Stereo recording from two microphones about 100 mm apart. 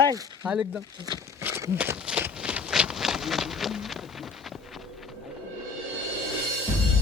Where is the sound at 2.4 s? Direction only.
10° right (ahead or behind).